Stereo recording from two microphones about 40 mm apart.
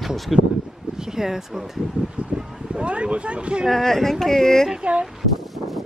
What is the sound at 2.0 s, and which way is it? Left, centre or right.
Speech, right.